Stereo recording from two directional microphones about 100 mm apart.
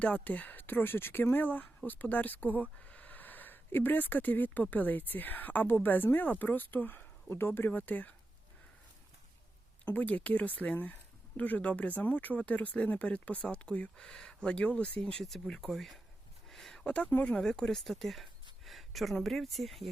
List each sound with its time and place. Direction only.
0.0 s speech: 15° left (ahead or behind)
9.8 s speech: 15° left (ahead or behind); by 19.9 s centre (ahead or behind)